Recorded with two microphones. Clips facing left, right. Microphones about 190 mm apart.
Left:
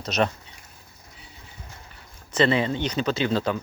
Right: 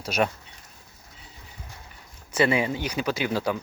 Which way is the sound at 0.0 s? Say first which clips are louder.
Left 1 dB; 10° right (ahead or behind).